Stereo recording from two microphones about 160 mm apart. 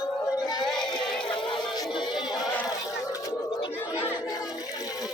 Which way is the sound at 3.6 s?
35° left (ahead or behind).